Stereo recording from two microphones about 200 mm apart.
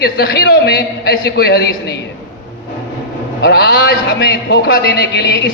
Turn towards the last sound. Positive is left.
turn(degrees=55)  # may be behind; listen again after turning